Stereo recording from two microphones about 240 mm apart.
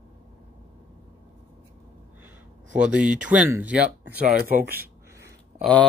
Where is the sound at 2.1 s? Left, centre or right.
Centre.